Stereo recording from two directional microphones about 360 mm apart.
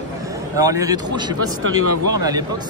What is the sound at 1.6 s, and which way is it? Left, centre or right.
Speech, right.